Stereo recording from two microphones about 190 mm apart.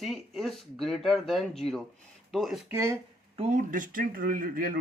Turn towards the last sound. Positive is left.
turn(degrees=-50)  # may be behind; listen again after turning